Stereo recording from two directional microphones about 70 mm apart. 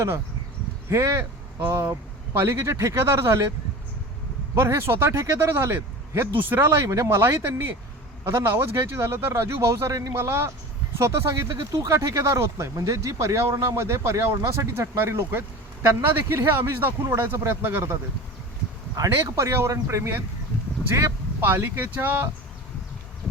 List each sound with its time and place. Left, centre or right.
0.9 s speech: right
4.5 s speech: right
6.8 s speech: right
10.1 s speech: right
19.1 s speech: right
21.4 s speech: right